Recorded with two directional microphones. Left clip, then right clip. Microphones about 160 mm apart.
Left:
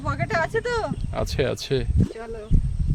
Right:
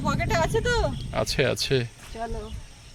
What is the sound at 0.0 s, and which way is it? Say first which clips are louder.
Speech: left 1 dB; 30° right (ahead or behind).